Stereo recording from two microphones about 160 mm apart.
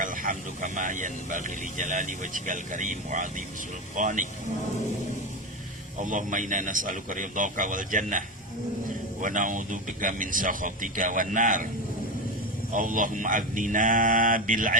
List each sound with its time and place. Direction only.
0.0 s speech: 55° right (ahead or behind)
6.0 s speech: 55° right (ahead or behind)
9.2 s speech: 55° right (ahead or behind)
12.7 s speech: 55° right (ahead or behind)